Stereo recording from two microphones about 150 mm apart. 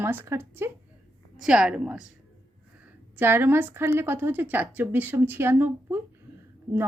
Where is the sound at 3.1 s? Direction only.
15° right (ahead or behind).